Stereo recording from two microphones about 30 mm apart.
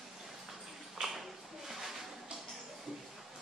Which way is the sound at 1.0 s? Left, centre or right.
Centre.